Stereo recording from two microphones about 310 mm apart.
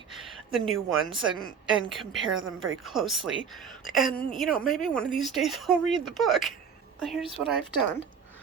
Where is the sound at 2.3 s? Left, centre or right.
Right.